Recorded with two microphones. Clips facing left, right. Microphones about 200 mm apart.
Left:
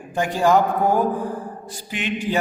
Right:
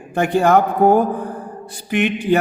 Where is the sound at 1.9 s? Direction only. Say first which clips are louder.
Right 7 dB; 60° right (ahead or behind).